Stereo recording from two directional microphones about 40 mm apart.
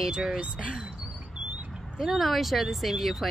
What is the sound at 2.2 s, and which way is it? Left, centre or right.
Speech, centre.